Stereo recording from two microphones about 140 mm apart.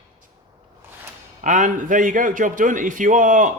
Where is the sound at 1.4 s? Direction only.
65° right (ahead or behind).